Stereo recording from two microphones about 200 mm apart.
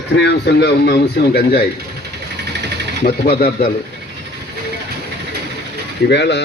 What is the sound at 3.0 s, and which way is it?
Speech, 45° left (ahead or behind).